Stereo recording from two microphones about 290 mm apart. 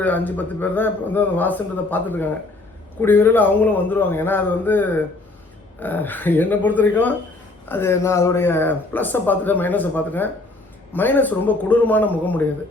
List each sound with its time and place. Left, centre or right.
0.0 s a man's voice: centre